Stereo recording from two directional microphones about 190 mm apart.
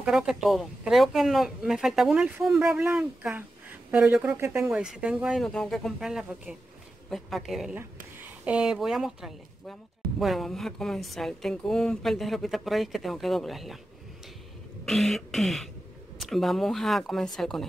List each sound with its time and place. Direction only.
0.0 s a woman's voice: 5° right (ahead or behind)
14.9 s a woman's voice: centre (ahead or behind)